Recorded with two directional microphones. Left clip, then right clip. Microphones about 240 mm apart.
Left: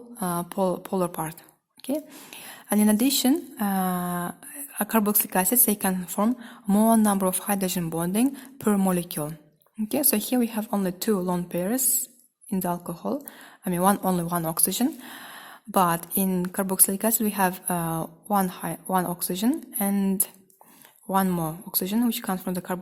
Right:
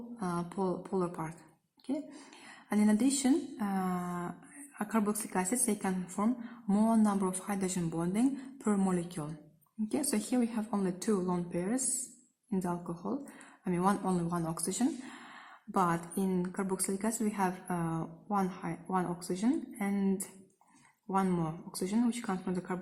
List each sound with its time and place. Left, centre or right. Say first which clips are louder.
0.2 s speech: left 9 dB; left